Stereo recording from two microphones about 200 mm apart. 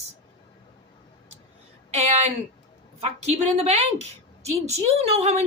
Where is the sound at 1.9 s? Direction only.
35° right (ahead or behind).